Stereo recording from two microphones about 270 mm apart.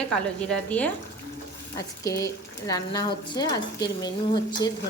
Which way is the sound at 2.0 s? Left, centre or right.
Centre.